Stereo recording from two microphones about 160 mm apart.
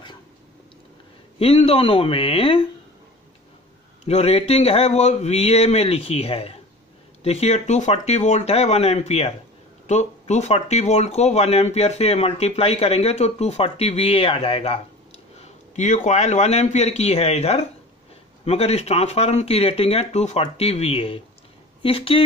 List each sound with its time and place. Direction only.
1.4 s speech: 40° left (ahead or behind)
4.0 s a man's voice: 40° left (ahead or behind)
15.4 s a man's voice: 45° left (ahead or behind)